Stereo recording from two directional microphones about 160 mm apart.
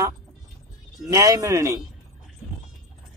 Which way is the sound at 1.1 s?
20° right (ahead or behind).